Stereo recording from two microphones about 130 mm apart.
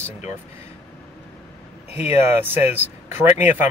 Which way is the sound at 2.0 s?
15° right (ahead or behind).